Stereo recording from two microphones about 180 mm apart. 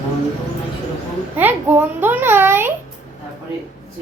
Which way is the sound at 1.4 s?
10° right (ahead or behind).